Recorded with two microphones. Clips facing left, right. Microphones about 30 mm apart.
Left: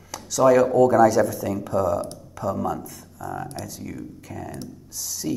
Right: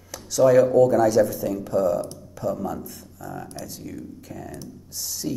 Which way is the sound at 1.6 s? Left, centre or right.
Left.